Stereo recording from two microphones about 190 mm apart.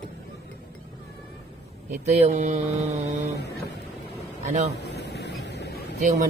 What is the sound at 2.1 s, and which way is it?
Mantra, 35° right (ahead or behind).